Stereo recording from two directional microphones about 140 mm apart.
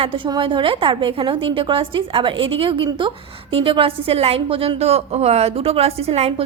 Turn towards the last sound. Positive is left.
turn(degrees=-45)  # may be behind; listen again after turning